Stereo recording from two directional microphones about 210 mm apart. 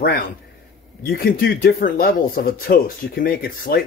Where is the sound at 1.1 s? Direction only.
45° left (ahead or behind).